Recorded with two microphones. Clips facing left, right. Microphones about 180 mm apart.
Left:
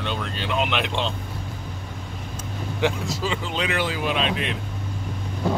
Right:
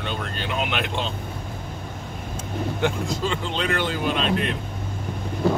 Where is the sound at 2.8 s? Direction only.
5° left (ahead or behind).